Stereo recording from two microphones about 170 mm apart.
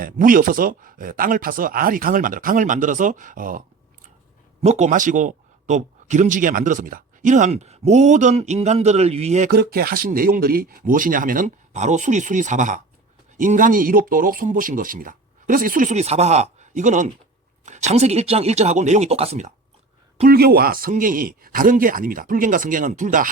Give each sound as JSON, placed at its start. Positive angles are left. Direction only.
{"t": 0.0, "sound": "speech", "side_deg": -55}
{"t": 4.6, "sound": "speech", "side_deg": -40}
{"t": 9.5, "sound": "speech", "side_deg": -65}
{"t": 20.2, "sound": "speech", "side_deg": -65}